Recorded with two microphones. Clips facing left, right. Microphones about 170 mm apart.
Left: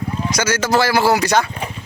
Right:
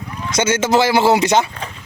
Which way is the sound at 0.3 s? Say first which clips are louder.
Right 3 dB; 25° right (ahead or behind).